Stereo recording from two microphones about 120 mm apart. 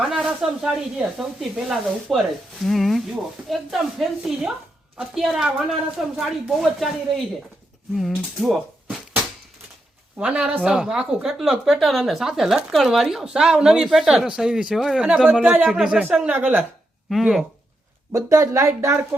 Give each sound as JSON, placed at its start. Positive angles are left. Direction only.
{"t": 0.0, "sound": "speech", "side_deg": -5}
{"t": 7.9, "sound": "speech", "side_deg": 0}
{"t": 10.2, "sound": "speech", "side_deg": -10}
{"t": 17.1, "sound": "speech", "side_deg": 0}
{"t": 18.1, "sound": "speech", "side_deg": -25}